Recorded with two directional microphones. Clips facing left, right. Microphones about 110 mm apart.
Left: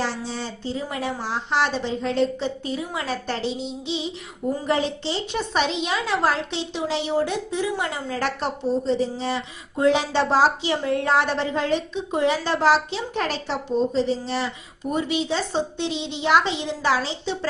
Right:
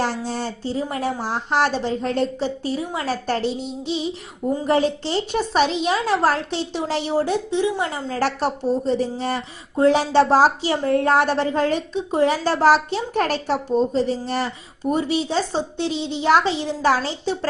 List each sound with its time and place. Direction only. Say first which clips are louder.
0.0 s a woman's voice: right 4 dB; 50° right (ahead or behind)
7.5 s a woman's voice: right 4 dB; 30° right (ahead or behind); by 9.4 s 50° right (ahead or behind)
9.7 s a woman's voice: right 4 dB; 35° right (ahead or behind)
14.8 s a woman's voice: right 3 dB; 35° right (ahead or behind)